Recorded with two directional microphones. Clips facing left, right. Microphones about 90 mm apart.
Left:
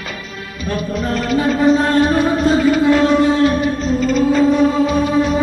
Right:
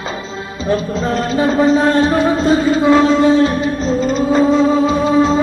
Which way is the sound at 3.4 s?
25° right (ahead or behind).